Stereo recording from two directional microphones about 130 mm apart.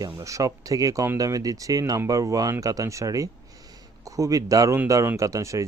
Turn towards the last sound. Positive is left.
turn(degrees=-25)  # may be behind; listen again after turning